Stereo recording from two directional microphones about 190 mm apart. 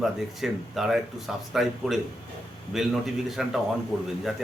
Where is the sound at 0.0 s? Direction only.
Centre (ahead or behind).